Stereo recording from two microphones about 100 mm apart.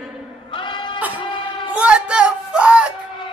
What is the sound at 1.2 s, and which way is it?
Music, 55° left (ahead or behind).